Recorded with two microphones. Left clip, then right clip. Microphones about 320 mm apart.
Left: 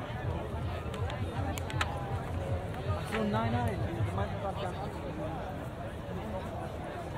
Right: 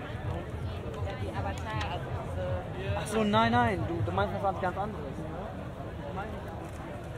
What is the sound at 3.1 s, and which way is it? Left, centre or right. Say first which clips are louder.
Speech: right 7 dB; centre.